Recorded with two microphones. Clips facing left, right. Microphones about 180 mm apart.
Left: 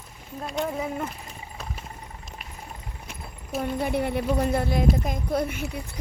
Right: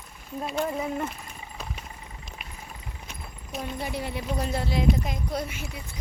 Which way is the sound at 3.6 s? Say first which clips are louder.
Left 6 dB; 55° left (ahead or behind).